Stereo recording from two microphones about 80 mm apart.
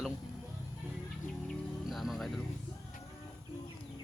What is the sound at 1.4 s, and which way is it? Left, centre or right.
Music, centre.